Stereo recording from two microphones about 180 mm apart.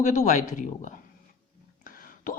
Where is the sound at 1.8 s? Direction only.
50° left (ahead or behind).